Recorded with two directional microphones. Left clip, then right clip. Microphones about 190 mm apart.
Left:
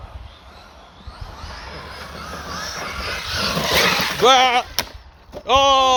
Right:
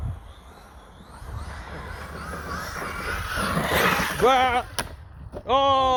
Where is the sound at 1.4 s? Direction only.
35° right (ahead or behind); by 3.1 s 15° right (ahead or behind).